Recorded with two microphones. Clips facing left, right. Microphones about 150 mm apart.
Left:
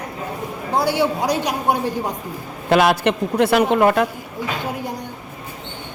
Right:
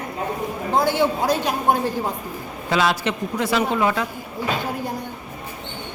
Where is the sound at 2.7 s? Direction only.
60° left (ahead or behind).